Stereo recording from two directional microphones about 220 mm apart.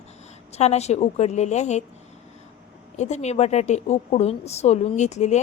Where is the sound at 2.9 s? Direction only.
30° left (ahead or behind).